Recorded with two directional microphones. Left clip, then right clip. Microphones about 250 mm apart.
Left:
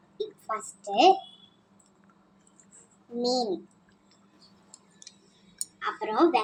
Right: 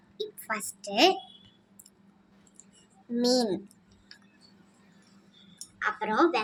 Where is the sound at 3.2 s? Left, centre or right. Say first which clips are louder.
Right 1 dB; right.